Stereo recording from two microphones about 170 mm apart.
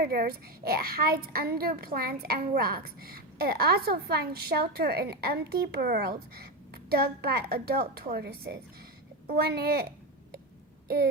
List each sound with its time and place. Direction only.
0.0 s a woman's voice: 60° right (ahead or behind)
10.8 s throat clearing: 65° right (ahead or behind)